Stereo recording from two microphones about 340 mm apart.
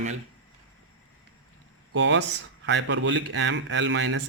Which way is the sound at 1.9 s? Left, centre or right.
Right.